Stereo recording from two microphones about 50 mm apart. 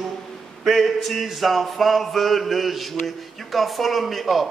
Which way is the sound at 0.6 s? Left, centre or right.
Centre.